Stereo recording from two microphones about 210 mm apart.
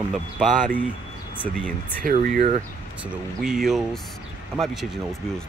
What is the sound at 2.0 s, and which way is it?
Speech, 40° right (ahead or behind).